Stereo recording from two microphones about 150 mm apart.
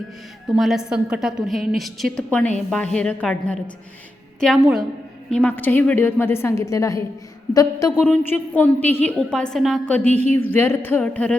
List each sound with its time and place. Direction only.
0.4 s a woman's voice: centre (ahead or behind)
5.3 s a woman's voice: 10° left (ahead or behind)
8.0 s a woman's voice: 10° left (ahead or behind)